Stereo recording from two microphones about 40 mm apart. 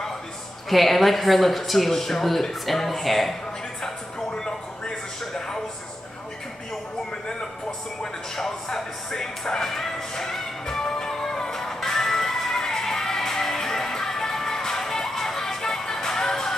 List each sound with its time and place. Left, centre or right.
0.7 s speech: centre
4.3 s a sound: centre
5.2 s television: centre
8.4 s music: centre